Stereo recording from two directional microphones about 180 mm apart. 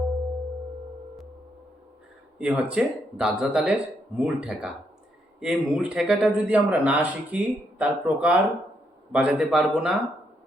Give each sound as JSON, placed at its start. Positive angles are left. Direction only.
{"t": 2.4, "sound": "speech", "side_deg": -5}